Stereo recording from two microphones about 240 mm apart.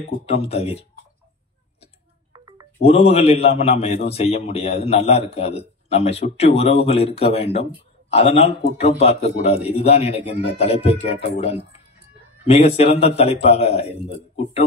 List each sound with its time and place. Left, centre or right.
0.3 s a man's voice: left
2.3 s music: centre
2.8 s a man's voice: left
12.4 s a man's voice: left